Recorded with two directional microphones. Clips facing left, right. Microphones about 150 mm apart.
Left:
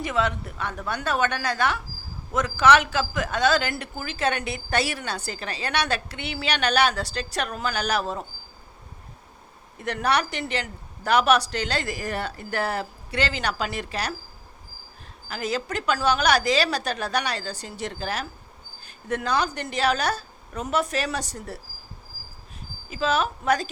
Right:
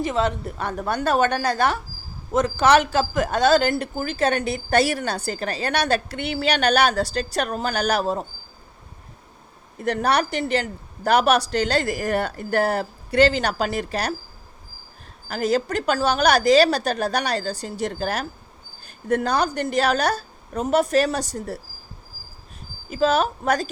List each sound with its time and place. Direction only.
0.0 s a woman's voice: 30° right (ahead or behind)
9.8 s a woman's voice: 35° right (ahead or behind)
15.3 s a woman's voice: 40° right (ahead or behind)
22.9 s a woman's voice: 40° right (ahead or behind)